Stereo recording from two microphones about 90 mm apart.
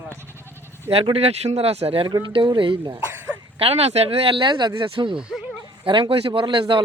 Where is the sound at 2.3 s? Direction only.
70° right (ahead or behind).